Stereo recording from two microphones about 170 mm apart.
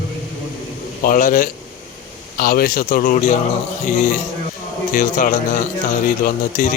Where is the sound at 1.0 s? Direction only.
55° left (ahead or behind).